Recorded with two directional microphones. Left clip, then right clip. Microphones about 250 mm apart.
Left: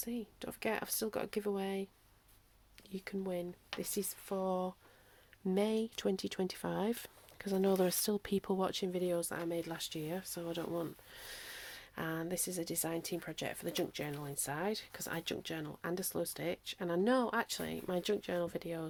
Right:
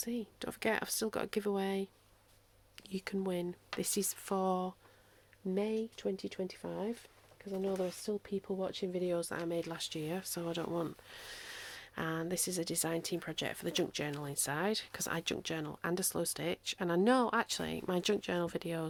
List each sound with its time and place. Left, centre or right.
0.0 s speech: centre
5.5 s speech: centre
9.0 s speech: centre; by 18.9 s right